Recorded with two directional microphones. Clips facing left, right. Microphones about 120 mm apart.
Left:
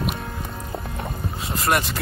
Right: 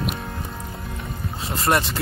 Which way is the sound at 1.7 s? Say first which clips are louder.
Right 1 dB; 30° right (ahead or behind).